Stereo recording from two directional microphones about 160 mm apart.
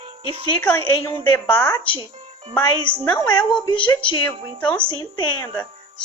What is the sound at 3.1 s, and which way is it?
A woman's voice, 25° left (ahead or behind).